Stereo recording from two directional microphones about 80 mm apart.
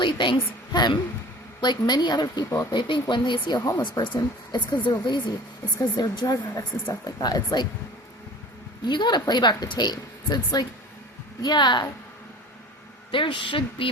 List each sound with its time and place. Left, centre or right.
0.0 s a woman's voice: left
2.7 s speech: left
5.9 s a woman's voice: left
8.8 s a woman's voice: left
11.4 s speech: left
13.1 s a woman's voice: left